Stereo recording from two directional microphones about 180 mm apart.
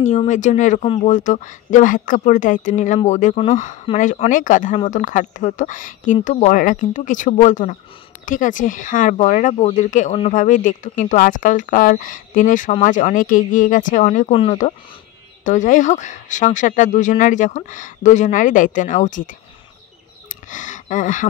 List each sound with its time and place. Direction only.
0.0 s speech: 40° left (ahead or behind)
14.3 s speech: 35° left (ahead or behind)
15.4 s speech: 45° left (ahead or behind)
20.4 s speech: 45° left (ahead or behind)